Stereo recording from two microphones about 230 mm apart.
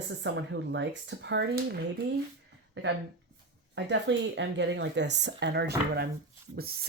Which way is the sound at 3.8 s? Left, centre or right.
Right.